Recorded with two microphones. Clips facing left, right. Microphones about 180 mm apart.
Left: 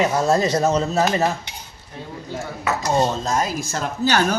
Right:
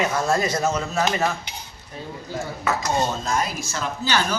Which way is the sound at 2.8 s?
35° left (ahead or behind).